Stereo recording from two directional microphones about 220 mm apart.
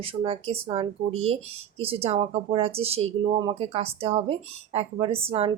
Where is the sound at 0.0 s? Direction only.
25° right (ahead or behind).